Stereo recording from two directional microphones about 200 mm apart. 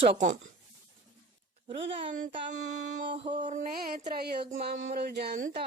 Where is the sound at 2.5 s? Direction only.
35° right (ahead or behind).